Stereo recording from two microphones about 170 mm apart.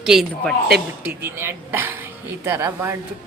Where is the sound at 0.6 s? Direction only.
65° right (ahead or behind).